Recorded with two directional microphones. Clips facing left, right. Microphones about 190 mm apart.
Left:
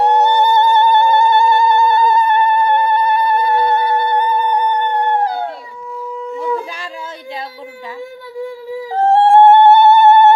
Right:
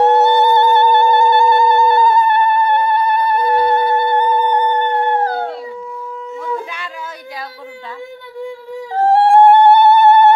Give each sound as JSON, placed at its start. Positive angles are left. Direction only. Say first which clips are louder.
{"t": 0.0, "sound": "music", "louder": "right 1 dB", "side_deg": 15}
{"t": 1.7, "sound": "theremin", "louder": "right 1 dB", "side_deg": 20}
{"t": 9.0, "sound": "a sound", "louder": "left 1 dB", "side_deg": 25}